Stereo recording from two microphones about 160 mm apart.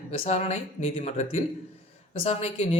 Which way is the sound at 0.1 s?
40° left (ahead or behind).